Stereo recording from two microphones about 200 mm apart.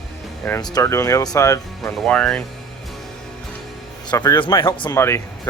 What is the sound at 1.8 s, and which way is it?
Speech, 5° left (ahead or behind).